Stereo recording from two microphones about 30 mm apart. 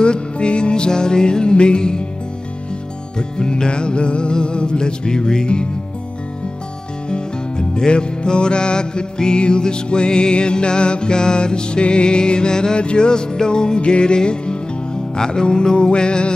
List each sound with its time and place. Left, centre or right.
0.0 s music: left
3.2 s music: left
7.1 s music: left